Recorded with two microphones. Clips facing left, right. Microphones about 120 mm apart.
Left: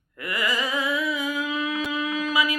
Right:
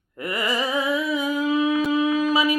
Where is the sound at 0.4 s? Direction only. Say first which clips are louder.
Right 3 dB; 25° right (ahead or behind).